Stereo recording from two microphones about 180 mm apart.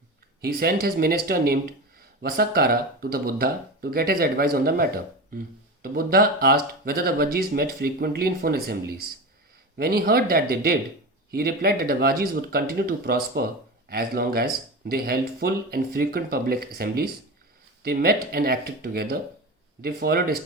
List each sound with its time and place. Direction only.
0.4 s speech: 55° right (ahead or behind)